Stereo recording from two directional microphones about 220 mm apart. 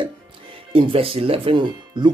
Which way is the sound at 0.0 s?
25° right (ahead or behind).